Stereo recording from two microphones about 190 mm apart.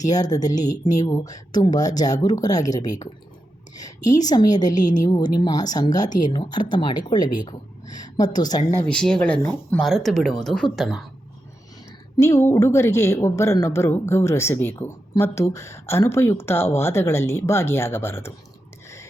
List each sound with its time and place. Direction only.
0.0 s speech: 20° left (ahead or behind)
4.2 s speech: 20° left (ahead or behind)
4.8 s a woman's voice: 40° left (ahead or behind)
5.0 s speech: 20° left (ahead or behind)
8.9 s speech: 5° left (ahead or behind)
12.1 s a woman's voice: 15° left (ahead or behind)